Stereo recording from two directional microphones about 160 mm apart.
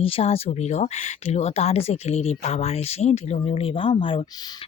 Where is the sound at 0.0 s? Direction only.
40° left (ahead or behind).